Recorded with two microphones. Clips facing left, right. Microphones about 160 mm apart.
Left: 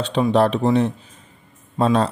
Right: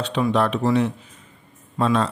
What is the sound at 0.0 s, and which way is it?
A man's voice, 30° left (ahead or behind).